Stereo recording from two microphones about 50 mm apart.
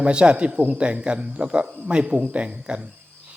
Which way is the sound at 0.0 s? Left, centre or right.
Right.